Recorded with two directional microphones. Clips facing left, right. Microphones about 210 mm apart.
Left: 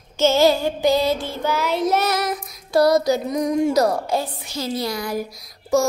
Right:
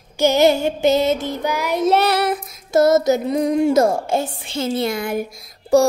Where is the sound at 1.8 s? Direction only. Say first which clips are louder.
Right 7 dB; 30° right (ahead or behind).